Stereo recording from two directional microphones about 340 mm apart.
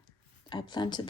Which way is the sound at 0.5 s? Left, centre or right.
Centre.